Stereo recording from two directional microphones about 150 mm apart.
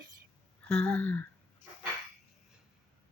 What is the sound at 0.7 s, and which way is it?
Speech, 10° left (ahead or behind).